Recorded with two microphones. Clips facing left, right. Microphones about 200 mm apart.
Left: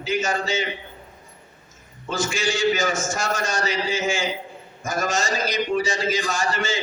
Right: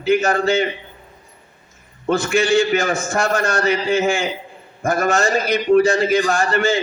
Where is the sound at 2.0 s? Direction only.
60° right (ahead or behind).